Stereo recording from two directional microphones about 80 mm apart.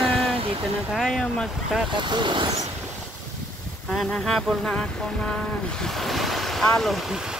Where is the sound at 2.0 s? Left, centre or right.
Right.